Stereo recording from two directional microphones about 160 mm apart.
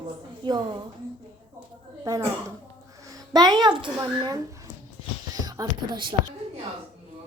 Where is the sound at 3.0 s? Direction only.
25° right (ahead or behind).